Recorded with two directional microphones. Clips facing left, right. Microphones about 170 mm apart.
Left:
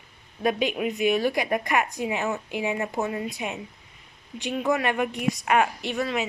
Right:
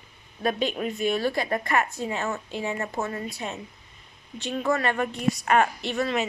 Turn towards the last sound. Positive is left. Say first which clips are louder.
# right 1 dB
turn(degrees=10)  # may be behind; listen again after turning